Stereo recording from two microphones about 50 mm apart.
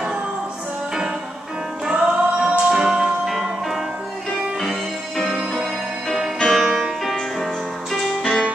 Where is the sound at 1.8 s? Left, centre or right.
Centre.